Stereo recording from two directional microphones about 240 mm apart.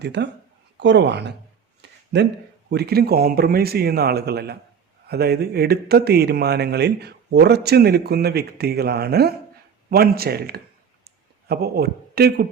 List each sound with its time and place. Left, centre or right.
0.0 s speech: right
2.6 s speech: right